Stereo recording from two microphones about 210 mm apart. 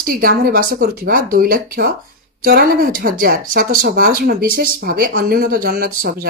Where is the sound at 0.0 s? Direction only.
45° right (ahead or behind).